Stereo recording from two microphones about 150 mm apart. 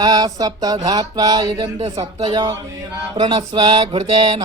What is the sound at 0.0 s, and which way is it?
Speech, 25° right (ahead or behind).